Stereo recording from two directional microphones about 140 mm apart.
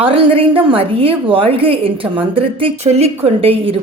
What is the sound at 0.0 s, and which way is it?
A woman's voice, 40° right (ahead or behind).